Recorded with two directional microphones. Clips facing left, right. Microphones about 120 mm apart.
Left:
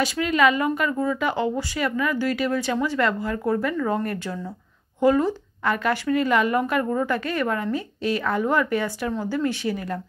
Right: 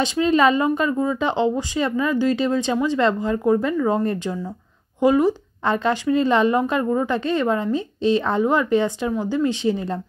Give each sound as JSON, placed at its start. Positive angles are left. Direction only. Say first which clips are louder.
{"t": 0.0, "sound": "speech", "louder": "right 3 dB", "side_deg": -25}